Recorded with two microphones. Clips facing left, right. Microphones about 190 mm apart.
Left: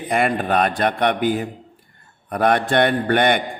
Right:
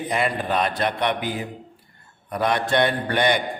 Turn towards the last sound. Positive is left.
turn(degrees=55)  # may be behind; listen again after turning